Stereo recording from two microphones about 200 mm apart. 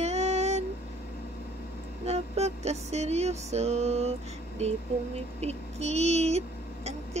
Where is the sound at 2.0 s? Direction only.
30° right (ahead or behind).